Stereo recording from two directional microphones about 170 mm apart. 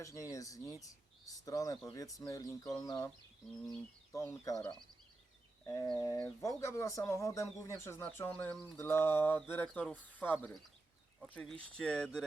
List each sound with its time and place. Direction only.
0.0 s speech: 20° left (ahead or behind)
4.1 s speech: 20° left (ahead or behind)
5.6 s speech: 20° left (ahead or behind)
6.1 s speech: 10° left (ahead or behind)